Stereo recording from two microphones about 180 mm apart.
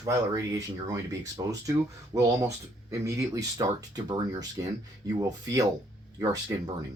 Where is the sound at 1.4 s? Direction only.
20° right (ahead or behind).